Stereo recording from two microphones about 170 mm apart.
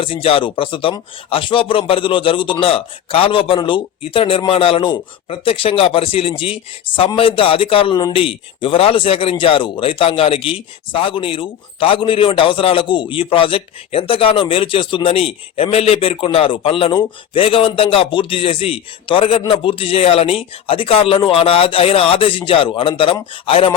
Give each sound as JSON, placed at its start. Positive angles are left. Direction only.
{"t": 0.0, "sound": "speech", "side_deg": 35}